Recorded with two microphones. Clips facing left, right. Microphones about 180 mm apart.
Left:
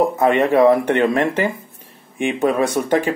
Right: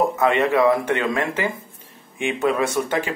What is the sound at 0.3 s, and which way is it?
Speech, 40° left (ahead or behind).